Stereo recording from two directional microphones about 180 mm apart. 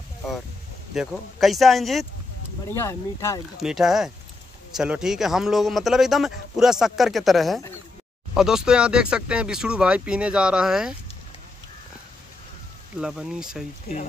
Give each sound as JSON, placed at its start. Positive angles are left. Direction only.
{"t": 0.9, "sound": "a man's voice", "side_deg": 0}
{"t": 2.7, "sound": "speech", "side_deg": 15}
{"t": 3.5, "sound": "a man's voice", "side_deg": 0}
{"t": 13.0, "sound": "a man's voice", "side_deg": -5}
{"t": 13.9, "sound": "speech", "side_deg": 55}